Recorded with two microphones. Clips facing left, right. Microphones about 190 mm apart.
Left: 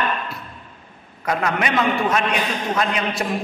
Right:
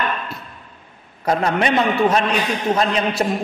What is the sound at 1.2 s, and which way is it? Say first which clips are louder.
A man's voice: right 4 dB; 30° right (ahead or behind).